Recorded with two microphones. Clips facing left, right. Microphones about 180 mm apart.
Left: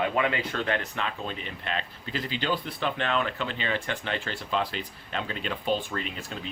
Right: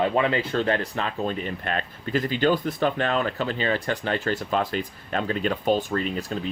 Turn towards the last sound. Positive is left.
turn(degrees=-40)  # may be behind; listen again after turning